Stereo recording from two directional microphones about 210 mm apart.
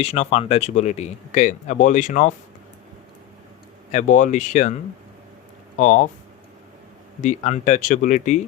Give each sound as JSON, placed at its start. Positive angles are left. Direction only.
{"t": 0.0, "sound": "speech", "side_deg": 30}
{"t": 3.9, "sound": "speech", "side_deg": 35}
{"t": 7.2, "sound": "speech", "side_deg": 35}